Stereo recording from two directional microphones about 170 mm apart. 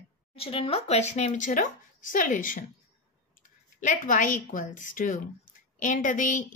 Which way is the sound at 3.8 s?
50° left (ahead or behind).